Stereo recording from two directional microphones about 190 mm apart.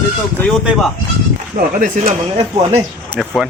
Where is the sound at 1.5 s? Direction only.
45° right (ahead or behind).